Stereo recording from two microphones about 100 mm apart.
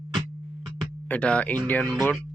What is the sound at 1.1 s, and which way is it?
Speech, 10° left (ahead or behind).